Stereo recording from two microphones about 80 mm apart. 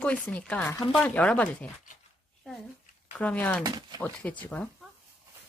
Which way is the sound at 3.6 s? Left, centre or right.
Right.